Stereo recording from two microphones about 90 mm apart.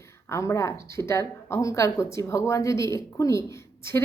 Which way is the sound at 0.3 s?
35° left (ahead or behind).